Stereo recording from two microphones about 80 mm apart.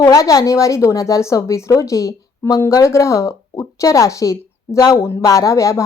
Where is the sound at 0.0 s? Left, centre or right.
Left.